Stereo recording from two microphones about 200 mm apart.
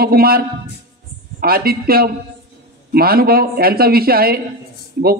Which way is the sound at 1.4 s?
50° right (ahead or behind).